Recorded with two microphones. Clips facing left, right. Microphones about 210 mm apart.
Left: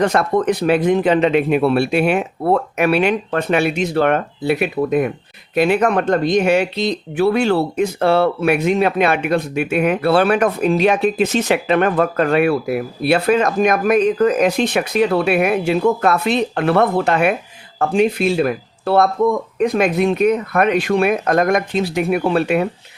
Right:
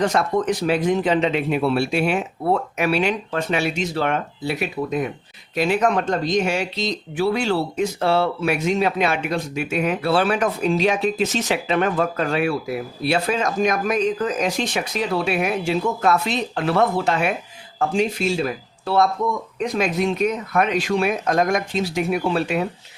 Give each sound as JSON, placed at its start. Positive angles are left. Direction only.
{"t": 0.0, "sound": "speech", "side_deg": 60}